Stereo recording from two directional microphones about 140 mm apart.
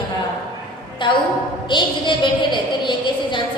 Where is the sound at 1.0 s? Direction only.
35° left (ahead or behind).